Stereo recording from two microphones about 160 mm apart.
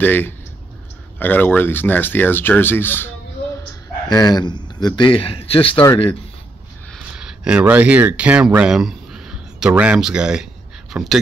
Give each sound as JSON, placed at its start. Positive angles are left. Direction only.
{"t": 0.0, "sound": "speech", "side_deg": 10}
{"t": 4.1, "sound": "a man's voice", "side_deg": 25}
{"t": 6.9, "sound": "speech", "side_deg": -5}